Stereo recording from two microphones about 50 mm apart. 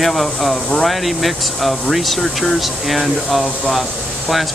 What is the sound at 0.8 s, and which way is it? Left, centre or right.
Speech, centre.